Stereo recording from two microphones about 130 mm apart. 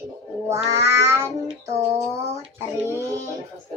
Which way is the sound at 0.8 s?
20° right (ahead or behind).